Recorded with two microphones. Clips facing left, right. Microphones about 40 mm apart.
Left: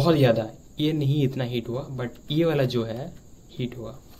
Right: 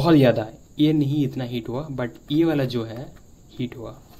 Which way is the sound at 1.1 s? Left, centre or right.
Centre.